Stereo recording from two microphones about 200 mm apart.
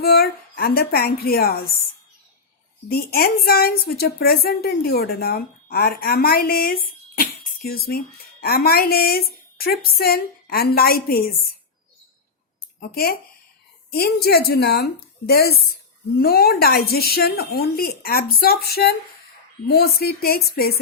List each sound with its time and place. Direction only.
0.0 s a woman's voice: 50° left (ahead or behind)
2.9 s a woman's voice: 50° left (ahead or behind)
12.9 s a woman's voice: 50° left (ahead or behind)